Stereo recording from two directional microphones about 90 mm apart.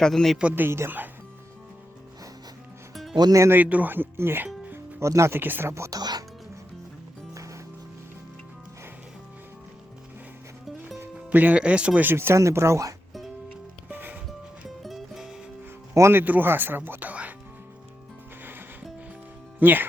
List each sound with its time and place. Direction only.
0.0 s a man's voice: 5° left (ahead or behind)
0.3 s speech: 20° right (ahead or behind)
2.9 s music: centre (ahead or behind)
3.2 s speech: 45° right (ahead or behind)
3.4 s speech: 20° right (ahead or behind)
4.9 s speech: 35° right (ahead or behind)
6.0 s speech: 50° right (ahead or behind)
11.3 s speech: 20° right (ahead or behind)
12.1 s speech: 30° right (ahead or behind)
13.9 s music: 20° right (ahead or behind)
14.8 s music: centre (ahead or behind)
16.0 s speech: 30° right (ahead or behind)
19.5 s speech: 20° right (ahead or behind)